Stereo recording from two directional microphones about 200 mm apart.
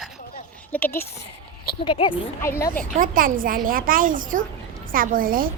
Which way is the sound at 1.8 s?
25° left (ahead or behind).